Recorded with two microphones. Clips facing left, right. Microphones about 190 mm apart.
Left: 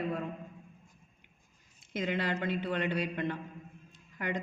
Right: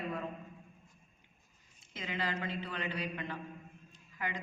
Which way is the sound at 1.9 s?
65° left (ahead or behind).